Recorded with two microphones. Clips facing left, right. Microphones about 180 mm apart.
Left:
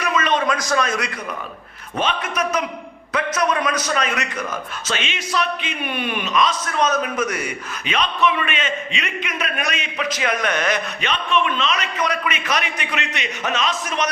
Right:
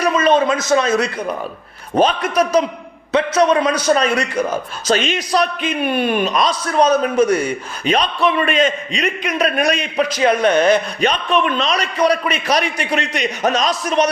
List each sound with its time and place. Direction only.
0.0 s a man's voice: 30° right (ahead or behind)